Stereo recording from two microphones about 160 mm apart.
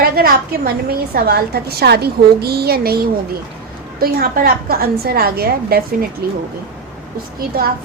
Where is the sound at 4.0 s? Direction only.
70° right (ahead or behind).